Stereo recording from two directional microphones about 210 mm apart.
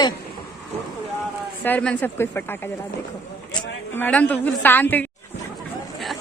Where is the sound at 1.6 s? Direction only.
5° left (ahead or behind).